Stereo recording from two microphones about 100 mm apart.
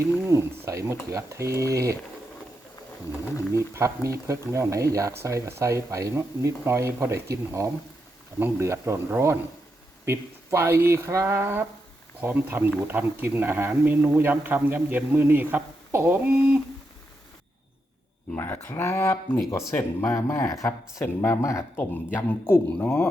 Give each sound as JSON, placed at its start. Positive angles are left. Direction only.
{"t": 0.0, "sound": "a man's voice", "side_deg": -30}
{"t": 3.8, "sound": "a man's voice", "side_deg": -30}
{"t": 18.3, "sound": "speech", "side_deg": 25}